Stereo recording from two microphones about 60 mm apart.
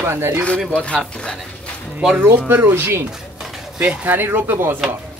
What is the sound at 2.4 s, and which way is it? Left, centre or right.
Speech, right.